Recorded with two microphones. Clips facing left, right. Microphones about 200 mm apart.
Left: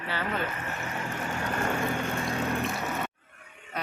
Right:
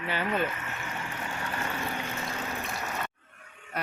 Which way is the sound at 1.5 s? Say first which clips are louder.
Left 7 dB; 50° left (ahead or behind).